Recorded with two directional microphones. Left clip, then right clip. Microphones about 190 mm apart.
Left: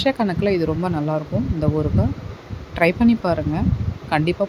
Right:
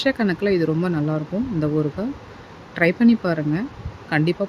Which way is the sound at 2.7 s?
Centre (ahead or behind).